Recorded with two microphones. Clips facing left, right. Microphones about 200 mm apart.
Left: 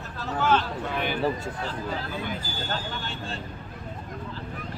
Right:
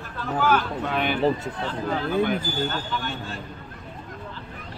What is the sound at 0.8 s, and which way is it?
Speech, 65° right (ahead or behind).